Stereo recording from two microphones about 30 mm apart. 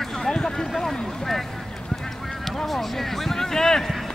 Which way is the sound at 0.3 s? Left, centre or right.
Left.